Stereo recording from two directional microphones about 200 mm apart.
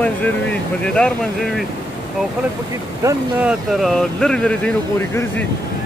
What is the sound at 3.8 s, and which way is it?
Speech, centre (ahead or behind).